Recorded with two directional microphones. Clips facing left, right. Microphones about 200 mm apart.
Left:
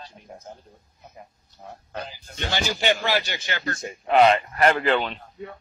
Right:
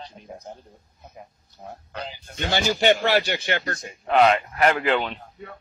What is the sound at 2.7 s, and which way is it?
Speech, 55° right (ahead or behind).